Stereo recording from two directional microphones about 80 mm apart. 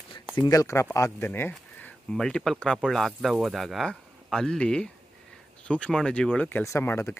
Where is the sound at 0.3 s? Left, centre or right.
Left.